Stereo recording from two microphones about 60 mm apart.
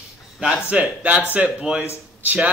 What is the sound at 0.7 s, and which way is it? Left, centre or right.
Speech, centre.